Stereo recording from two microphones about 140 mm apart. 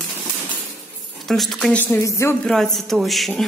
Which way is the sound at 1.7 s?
15° left (ahead or behind).